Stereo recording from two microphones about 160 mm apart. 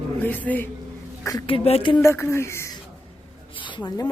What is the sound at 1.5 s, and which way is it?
Speech, 35° left (ahead or behind).